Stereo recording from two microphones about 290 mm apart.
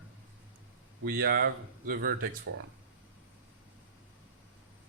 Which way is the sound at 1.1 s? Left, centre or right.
Right.